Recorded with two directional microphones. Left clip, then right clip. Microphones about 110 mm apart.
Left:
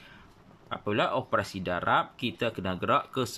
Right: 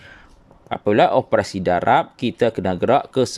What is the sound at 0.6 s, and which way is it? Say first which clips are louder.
Speech: right 13 dB; 70° right (ahead or behind).